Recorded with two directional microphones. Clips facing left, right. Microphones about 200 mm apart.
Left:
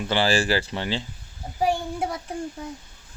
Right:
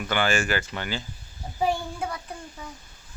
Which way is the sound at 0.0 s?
30° left (ahead or behind).